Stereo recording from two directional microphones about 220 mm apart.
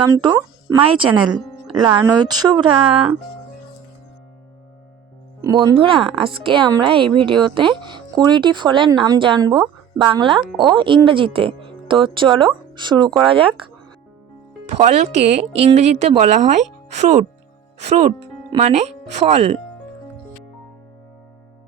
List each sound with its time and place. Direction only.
0.0 s speech: 15° right (ahead or behind)
5.4 s speech: 20° right (ahead or behind)
14.7 s speech: 30° right (ahead or behind)